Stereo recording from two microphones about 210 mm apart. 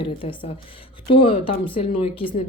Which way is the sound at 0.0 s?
25° left (ahead or behind).